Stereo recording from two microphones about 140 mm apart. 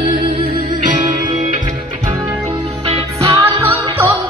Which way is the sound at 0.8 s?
60° right (ahead or behind).